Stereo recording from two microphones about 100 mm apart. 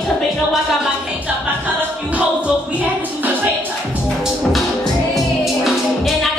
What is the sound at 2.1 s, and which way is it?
Music, 15° right (ahead or behind).